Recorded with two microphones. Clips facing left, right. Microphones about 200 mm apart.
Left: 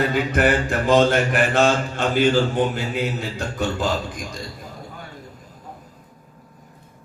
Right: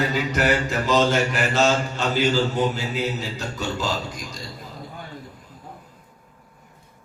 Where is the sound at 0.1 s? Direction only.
55° left (ahead or behind).